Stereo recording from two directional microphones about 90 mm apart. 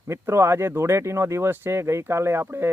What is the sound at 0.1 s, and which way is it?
Speech, 30° right (ahead or behind).